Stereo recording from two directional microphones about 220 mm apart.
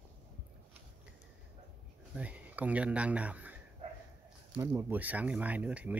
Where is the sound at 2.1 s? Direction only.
5° right (ahead or behind).